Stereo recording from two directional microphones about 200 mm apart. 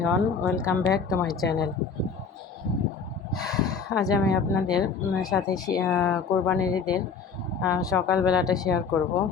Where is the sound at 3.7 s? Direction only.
20° left (ahead or behind).